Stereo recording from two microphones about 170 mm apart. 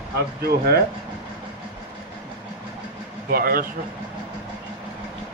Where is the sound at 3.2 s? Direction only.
60° right (ahead or behind).